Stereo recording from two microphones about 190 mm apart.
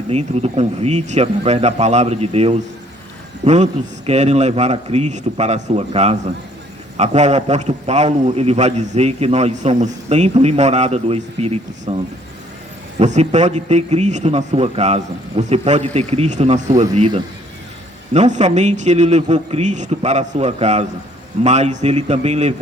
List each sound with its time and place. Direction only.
0.1 s a man's voice: 35° right (ahead or behind)
13.0 s a man's voice: 40° right (ahead or behind)
17.0 s a man's voice: 25° right (ahead or behind)
18.1 s a man's voice: 35° right (ahead or behind)